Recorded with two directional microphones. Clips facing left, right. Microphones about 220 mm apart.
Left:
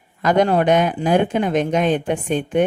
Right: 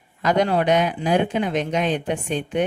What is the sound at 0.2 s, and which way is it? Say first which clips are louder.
Speech: left 3 dB; 50° left (ahead or behind).